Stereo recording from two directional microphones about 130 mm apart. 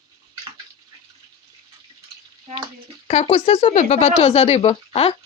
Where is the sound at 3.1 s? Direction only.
55° left (ahead or behind).